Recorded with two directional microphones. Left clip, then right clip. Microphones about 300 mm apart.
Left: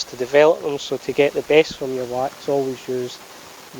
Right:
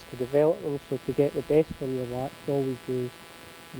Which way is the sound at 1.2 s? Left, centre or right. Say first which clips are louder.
Left 8 dB; centre.